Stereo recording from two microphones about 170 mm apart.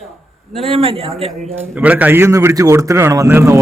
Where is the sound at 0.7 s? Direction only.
35° right (ahead or behind).